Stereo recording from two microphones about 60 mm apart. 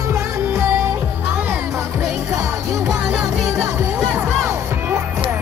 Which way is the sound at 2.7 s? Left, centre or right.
Right.